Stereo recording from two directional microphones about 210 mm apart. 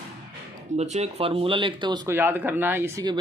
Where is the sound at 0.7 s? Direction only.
30° right (ahead or behind); by 3.1 s 15° right (ahead or behind).